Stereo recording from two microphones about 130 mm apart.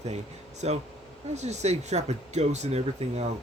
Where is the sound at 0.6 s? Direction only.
55° right (ahead or behind).